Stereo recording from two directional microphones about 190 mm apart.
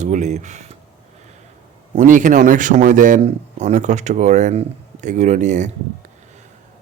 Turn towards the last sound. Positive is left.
turn(degrees=-40)  # may be behind; listen again after turning